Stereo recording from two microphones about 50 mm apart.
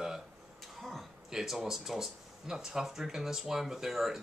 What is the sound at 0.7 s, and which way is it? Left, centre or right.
Speech, centre.